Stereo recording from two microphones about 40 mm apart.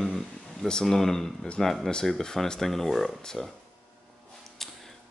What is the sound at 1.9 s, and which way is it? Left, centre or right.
Speech, centre.